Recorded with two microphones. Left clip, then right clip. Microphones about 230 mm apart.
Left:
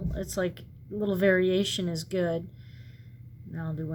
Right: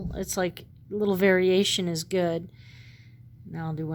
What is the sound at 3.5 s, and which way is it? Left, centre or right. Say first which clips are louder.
Speech: right 3 dB; right.